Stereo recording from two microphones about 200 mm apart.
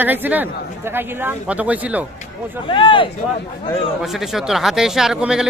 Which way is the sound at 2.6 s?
25° left (ahead or behind).